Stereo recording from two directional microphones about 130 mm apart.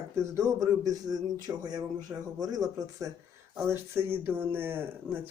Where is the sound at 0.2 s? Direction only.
25° right (ahead or behind).